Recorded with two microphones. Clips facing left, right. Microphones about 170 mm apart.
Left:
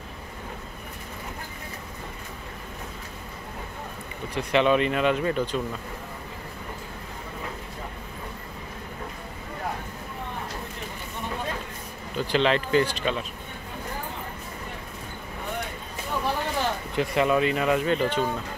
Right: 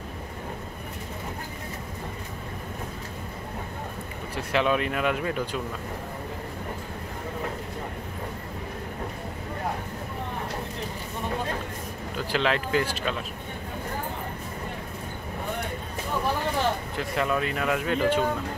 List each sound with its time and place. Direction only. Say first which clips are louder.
4.4 s speech: left 3 dB; 5° right (ahead or behind)
12.2 s speech: left 3 dB; 5° right (ahead or behind)
16.9 s speech: left 4 dB; centre (ahead or behind)